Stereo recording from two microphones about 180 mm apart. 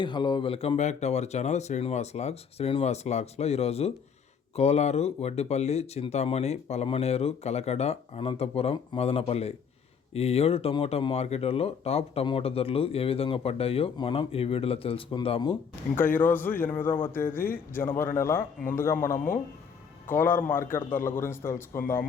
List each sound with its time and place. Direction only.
0.0 s speech: 25° left (ahead or behind)
16.1 s a man's voice: 10° left (ahead or behind)
19.1 s speech: 50° left (ahead or behind)
20.1 s a man's voice: 10° left (ahead or behind)